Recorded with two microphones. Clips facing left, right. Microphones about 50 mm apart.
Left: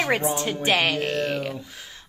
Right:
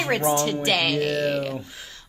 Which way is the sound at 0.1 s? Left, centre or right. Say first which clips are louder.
Right 2 dB; centre.